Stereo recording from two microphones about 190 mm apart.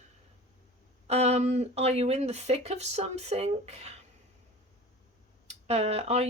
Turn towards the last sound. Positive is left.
turn(degrees=-35)  # may be behind; listen again after turning